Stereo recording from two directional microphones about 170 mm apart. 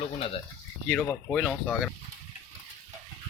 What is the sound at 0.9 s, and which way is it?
Speech, 5° left (ahead or behind).